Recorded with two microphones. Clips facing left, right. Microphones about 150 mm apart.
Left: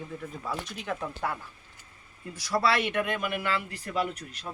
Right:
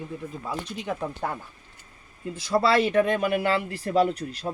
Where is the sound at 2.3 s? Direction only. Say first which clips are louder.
Right 5 dB; 25° right (ahead or behind).